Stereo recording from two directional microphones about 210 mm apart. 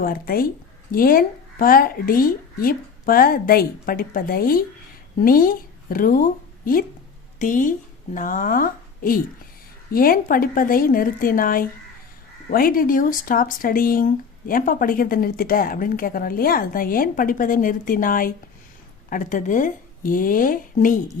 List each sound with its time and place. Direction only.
0.0 s speech: 45° left (ahead or behind)
7.3 s a woman's voice: 40° left (ahead or behind)